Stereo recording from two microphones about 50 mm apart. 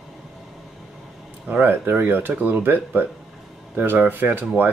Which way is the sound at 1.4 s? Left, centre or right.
Right.